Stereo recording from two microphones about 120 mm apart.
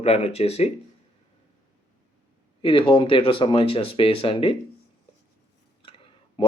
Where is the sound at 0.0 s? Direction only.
55° left (ahead or behind).